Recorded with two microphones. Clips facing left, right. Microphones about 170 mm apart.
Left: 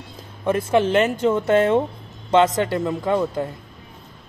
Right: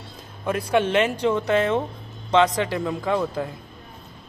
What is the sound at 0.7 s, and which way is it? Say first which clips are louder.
Speech: left 2 dB; centre (ahead or behind).